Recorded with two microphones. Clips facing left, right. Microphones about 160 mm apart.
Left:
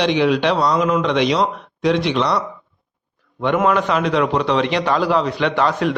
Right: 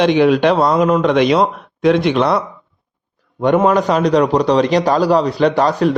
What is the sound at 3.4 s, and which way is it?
Speech, 40° right (ahead or behind).